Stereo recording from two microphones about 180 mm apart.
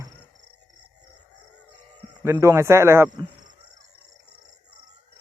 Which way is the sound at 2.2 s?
15° right (ahead or behind).